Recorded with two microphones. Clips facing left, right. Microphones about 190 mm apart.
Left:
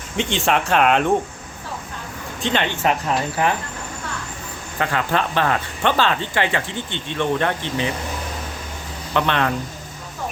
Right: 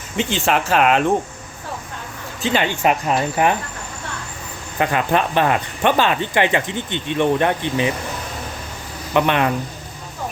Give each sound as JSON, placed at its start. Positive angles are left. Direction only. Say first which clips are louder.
{"t": 0.2, "sound": "speech", "louder": "right 1 dB", "side_deg": 0}
{"t": 2.4, "sound": "speech", "louder": "right 2 dB", "side_deg": -5}
{"t": 4.8, "sound": "speech", "louder": "right 3 dB", "side_deg": -15}
{"t": 9.1, "sound": "speech", "louder": "right 3 dB", "side_deg": -15}